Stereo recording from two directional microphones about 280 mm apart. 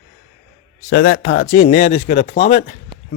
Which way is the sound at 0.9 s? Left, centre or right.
Left.